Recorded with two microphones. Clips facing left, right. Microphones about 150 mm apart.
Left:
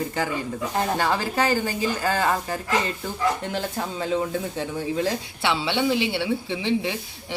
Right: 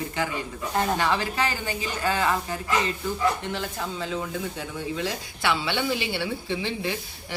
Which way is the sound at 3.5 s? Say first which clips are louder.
Left 3 dB; 45° left (ahead or behind).